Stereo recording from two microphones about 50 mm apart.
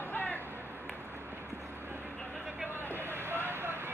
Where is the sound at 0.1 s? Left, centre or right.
Left.